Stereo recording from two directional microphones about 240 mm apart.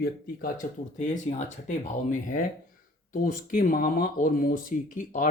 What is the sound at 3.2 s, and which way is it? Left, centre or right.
Speech, left.